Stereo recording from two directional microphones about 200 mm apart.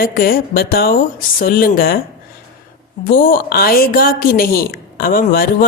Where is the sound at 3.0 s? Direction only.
45° left (ahead or behind).